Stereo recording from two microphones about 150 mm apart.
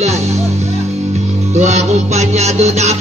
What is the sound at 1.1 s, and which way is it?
Music, 50° right (ahead or behind).